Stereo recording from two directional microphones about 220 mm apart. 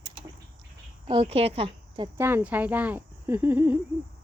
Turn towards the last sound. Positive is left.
turn(degrees=-10)  # may be behind; listen again after turning